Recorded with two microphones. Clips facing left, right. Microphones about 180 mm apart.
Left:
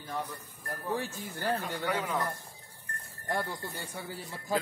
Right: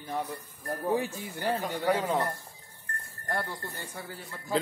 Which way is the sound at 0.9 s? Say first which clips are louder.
Right 4 dB; 15° right (ahead or behind).